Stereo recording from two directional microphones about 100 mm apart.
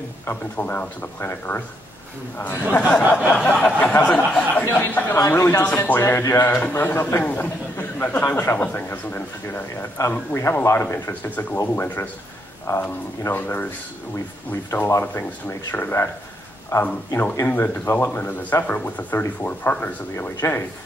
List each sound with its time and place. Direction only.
0.3 s speech: 20° left (ahead or behind)
3.0 s a sound: 15° right (ahead or behind)
3.3 s speech: 15° left (ahead or behind)
5.1 s speech: 30° left (ahead or behind)
16.7 s speech: 30° left (ahead or behind)
17.5 s speech: 20° left (ahead or behind)